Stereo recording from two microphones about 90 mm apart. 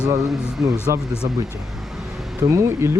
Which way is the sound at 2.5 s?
35° right (ahead or behind).